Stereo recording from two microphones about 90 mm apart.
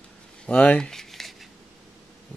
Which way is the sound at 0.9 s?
5° left (ahead or behind).